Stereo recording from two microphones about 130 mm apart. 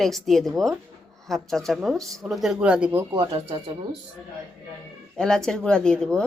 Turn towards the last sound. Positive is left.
turn(degrees=5)  # may be behind; listen again after turning